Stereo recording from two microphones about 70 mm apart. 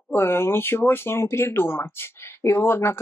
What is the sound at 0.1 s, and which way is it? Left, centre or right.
Speech, left.